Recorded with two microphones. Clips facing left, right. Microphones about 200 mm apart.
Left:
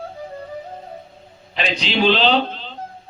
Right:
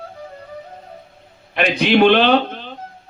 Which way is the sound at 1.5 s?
60° right (ahead or behind).